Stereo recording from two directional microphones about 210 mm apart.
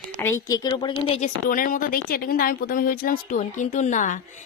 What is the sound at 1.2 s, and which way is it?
A woman's voice, 40° left (ahead or behind).